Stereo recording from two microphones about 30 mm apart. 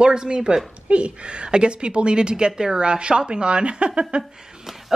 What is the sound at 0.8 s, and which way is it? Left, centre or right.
A woman's voice, right.